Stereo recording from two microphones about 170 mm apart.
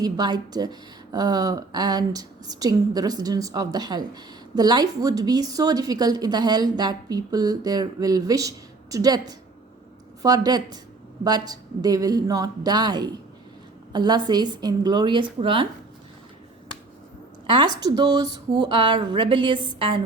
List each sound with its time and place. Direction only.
0.0 s speech: 25° right (ahead or behind)
17.4 s a sound: 30° right (ahead or behind)
17.7 s speech: 25° right (ahead or behind)